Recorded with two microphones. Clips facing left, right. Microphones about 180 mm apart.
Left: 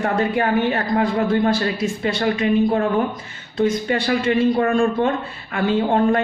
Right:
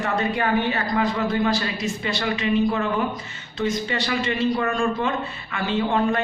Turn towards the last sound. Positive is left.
turn(degrees=50)  # may be behind; listen again after turning